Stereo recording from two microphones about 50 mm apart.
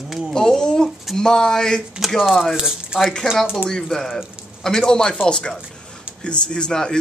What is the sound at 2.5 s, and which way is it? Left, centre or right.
Speech, centre.